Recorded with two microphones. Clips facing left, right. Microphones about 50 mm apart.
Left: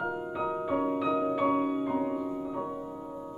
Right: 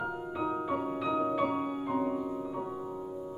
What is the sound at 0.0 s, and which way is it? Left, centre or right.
Music, centre.